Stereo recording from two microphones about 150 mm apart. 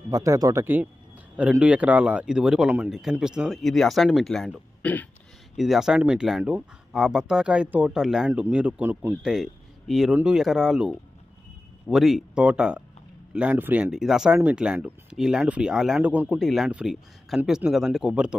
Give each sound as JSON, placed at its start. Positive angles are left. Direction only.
{"t": 0.1, "sound": "speech", "side_deg": -20}
{"t": 9.2, "sound": "speech", "side_deg": 0}